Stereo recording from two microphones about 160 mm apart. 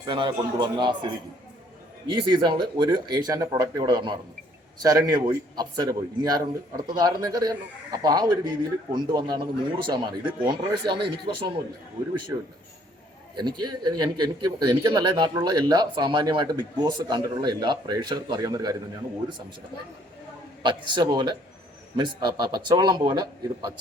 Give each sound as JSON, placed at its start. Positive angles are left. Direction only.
{"t": 0.0, "sound": "speech", "side_deg": -30}
{"t": 2.0, "sound": "speech", "side_deg": -30}
{"t": 13.3, "sound": "speech", "side_deg": -25}
{"t": 20.6, "sound": "speech", "side_deg": -30}